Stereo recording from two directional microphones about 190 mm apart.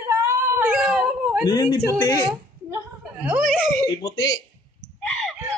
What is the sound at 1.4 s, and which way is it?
Speech, 20° left (ahead or behind).